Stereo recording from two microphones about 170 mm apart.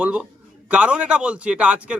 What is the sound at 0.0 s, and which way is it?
A man's voice, 5° right (ahead or behind).